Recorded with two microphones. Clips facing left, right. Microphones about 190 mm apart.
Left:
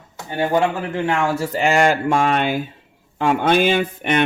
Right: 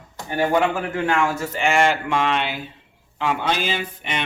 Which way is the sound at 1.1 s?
25° left (ahead or behind).